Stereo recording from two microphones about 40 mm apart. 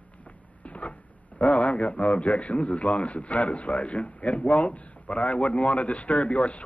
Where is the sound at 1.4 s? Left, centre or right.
Left.